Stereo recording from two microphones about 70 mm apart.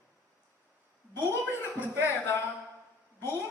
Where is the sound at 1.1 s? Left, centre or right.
Left.